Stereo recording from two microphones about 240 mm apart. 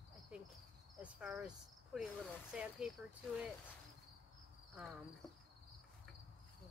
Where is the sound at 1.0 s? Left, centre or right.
Centre.